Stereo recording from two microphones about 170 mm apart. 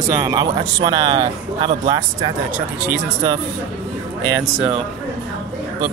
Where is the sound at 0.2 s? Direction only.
25° right (ahead or behind).